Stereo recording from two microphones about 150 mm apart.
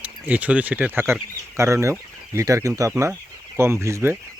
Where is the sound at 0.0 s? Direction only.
10° right (ahead or behind).